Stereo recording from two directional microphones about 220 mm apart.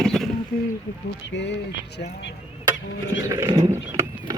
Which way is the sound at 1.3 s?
55° left (ahead or behind).